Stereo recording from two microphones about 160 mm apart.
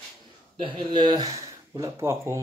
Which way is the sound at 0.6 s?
30° right (ahead or behind).